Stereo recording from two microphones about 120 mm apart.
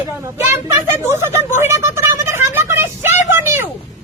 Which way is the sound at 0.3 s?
20° right (ahead or behind).